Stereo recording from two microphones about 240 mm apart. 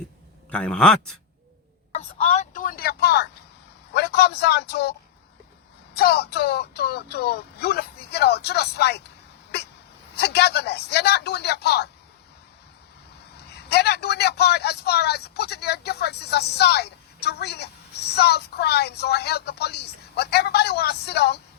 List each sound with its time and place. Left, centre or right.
0.5 s a man's voice: centre
2.0 s a man's voice: left
13.3 s a man's voice: left